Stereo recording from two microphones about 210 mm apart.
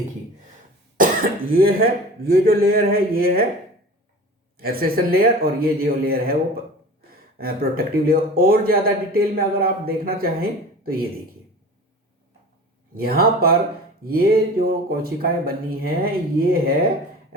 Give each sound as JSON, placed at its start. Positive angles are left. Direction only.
{"t": 0.9, "sound": "speech", "side_deg": -40}
{"t": 4.5, "sound": "speech", "side_deg": -45}
{"t": 7.3, "sound": "speech", "side_deg": -45}
{"t": 12.9, "sound": "speech", "side_deg": -45}